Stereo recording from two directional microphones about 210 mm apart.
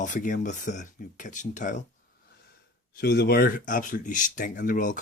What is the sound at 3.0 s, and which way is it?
Speech, 50° left (ahead or behind).